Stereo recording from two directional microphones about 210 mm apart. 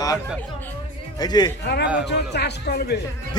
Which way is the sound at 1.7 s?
55° left (ahead or behind).